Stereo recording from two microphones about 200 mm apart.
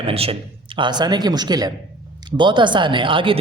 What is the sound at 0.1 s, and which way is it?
A woman's voice, 30° right (ahead or behind).